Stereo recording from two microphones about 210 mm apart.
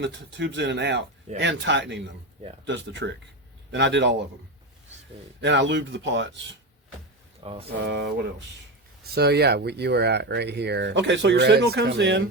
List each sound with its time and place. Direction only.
0.0 s speech: 55° right (ahead or behind)
5.4 s speech: 55° right (ahead or behind)
7.7 s speech: 55° right (ahead or behind)
9.1 s speech: 50° right (ahead or behind)